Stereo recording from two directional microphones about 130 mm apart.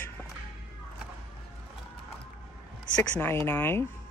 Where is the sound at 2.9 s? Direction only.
15° left (ahead or behind).